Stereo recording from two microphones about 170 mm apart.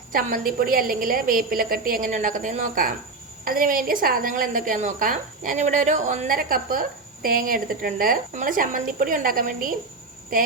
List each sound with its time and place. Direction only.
0.1 s a woman's voice: 55° right (ahead or behind)